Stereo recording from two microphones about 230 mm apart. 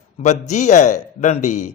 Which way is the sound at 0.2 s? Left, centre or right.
Left.